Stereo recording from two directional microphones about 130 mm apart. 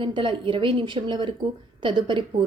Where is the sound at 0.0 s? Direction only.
40° right (ahead or behind).